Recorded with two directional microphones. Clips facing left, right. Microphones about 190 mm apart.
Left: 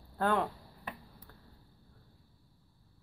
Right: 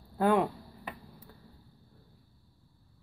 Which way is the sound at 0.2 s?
10° right (ahead or behind).